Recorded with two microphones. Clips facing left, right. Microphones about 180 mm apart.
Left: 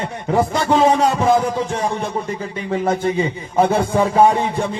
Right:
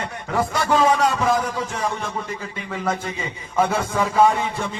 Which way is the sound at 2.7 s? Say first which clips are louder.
Left 8 dB; 30° left (ahead or behind).